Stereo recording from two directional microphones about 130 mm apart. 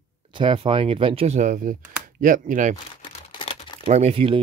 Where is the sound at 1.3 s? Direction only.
80° right.